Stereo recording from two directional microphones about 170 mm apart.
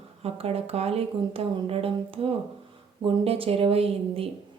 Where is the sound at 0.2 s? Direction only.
35° right (ahead or behind).